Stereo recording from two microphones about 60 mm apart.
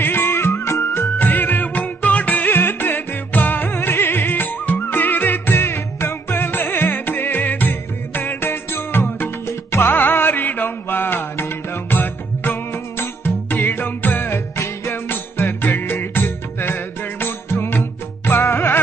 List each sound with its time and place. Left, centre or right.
0.0 s music of bollywood: left
18.3 s music: left